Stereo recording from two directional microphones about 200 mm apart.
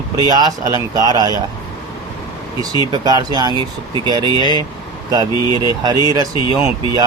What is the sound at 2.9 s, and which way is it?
Speech, 20° right (ahead or behind).